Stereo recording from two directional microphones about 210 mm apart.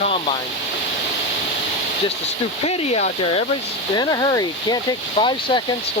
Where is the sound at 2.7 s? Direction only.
30° left (ahead or behind).